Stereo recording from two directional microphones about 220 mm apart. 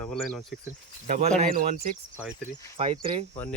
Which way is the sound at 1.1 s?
35° right (ahead or behind).